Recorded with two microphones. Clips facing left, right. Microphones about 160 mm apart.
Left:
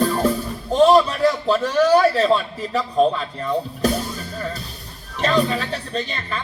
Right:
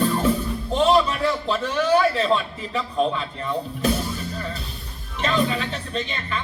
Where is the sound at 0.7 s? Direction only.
40° left (ahead or behind).